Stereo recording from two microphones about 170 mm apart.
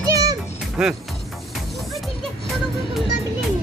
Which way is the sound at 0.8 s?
5° right (ahead or behind).